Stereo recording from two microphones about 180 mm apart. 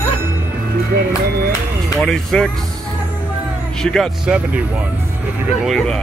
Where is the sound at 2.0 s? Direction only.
Centre (ahead or behind).